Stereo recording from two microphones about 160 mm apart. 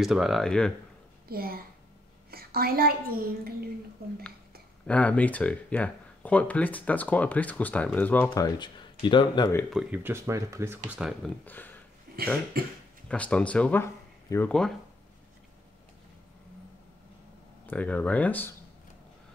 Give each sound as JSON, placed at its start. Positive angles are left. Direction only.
{"t": 0.0, "sound": "speech", "side_deg": 0}
{"t": 1.3, "sound": "a woman's voice", "side_deg": -70}
{"t": 4.8, "sound": "speech", "side_deg": 10}
{"t": 8.3, "sound": "speech", "side_deg": 30}
{"t": 9.8, "sound": "speech", "side_deg": -10}
{"t": 11.0, "sound": "speech", "side_deg": -5}
{"t": 11.4, "sound": "speech", "side_deg": 10}
{"t": 12.6, "sound": "a woman's voice", "side_deg": -70}
{"t": 13.1, "sound": "speech", "side_deg": 10}
{"t": 17.6, "sound": "speech", "side_deg": 10}